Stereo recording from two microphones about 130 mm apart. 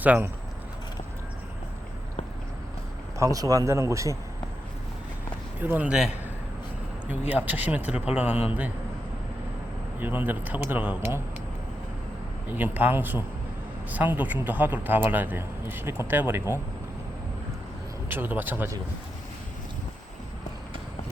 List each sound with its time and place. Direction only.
0.0 s a man's voice: 15° right (ahead or behind)
3.2 s a man's voice: 25° right (ahead or behind)
5.6 s a man's voice: 10° right (ahead or behind)
10.0 s a man's voice: 15° right (ahead or behind)
12.5 s a man's voice: 15° right (ahead or behind)
18.1 s a man's voice: 15° right (ahead or behind)